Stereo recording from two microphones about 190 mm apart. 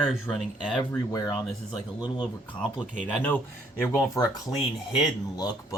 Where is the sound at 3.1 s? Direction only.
10° left (ahead or behind).